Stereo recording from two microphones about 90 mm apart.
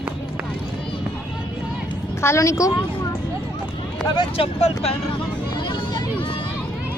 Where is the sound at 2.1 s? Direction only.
30° left (ahead or behind).